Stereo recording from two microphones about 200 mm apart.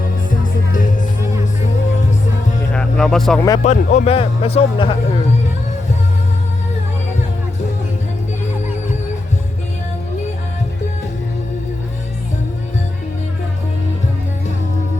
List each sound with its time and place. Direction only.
2.7 s music: centre (ahead or behind)
3.6 s speech: 35° left (ahead or behind)